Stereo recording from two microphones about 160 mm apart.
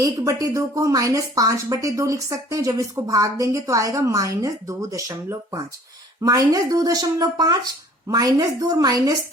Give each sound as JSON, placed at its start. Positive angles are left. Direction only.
{"t": 0.0, "sound": "speech", "side_deg": -20}